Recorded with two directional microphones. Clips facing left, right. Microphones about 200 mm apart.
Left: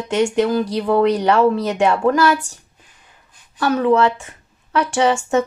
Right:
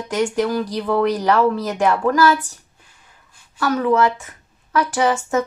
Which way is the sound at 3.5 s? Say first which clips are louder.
Left 2 dB; 25° left (ahead or behind).